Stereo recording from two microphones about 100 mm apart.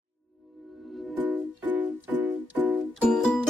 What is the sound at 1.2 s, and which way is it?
Music, 15° right (ahead or behind).